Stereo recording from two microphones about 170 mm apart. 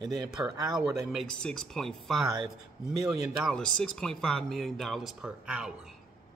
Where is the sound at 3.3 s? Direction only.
Centre (ahead or behind).